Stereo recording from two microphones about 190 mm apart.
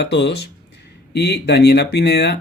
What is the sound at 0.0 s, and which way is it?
Speech, 65° left (ahead or behind).